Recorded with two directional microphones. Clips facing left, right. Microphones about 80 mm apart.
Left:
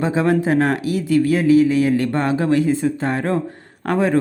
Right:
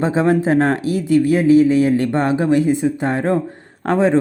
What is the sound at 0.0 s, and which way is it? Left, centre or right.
Speech, right.